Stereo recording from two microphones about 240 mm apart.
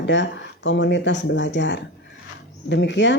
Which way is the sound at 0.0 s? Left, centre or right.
Left.